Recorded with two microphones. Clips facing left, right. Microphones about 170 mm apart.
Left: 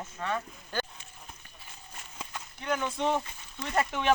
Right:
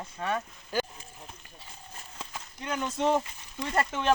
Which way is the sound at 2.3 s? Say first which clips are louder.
Left 3 dB; centre (ahead or behind).